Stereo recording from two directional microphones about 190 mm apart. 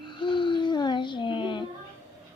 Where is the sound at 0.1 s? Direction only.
25° left (ahead or behind).